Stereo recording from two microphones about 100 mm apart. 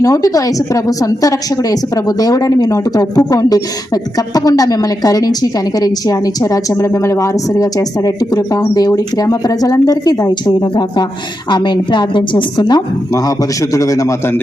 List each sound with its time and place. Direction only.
0.0 s a woman's voice: 35° left (ahead or behind)